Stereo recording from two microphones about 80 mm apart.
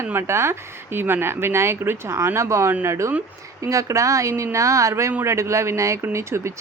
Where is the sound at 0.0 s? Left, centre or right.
Right.